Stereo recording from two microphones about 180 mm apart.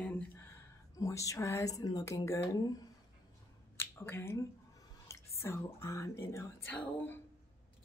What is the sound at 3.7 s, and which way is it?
Speech, 10° left (ahead or behind).